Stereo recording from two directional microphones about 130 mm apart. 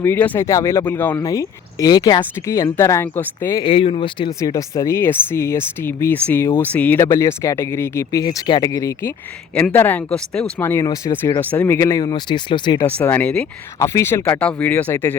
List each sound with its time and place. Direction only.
0.0 s speech: 15° left (ahead or behind)
1.2 s speech: 25° left (ahead or behind)
3.6 s speech: 45° left (ahead or behind)
4.3 s speech: 25° left (ahead or behind)
12.8 s speech: 15° left (ahead or behind)
13.7 s speech: 20° left (ahead or behind)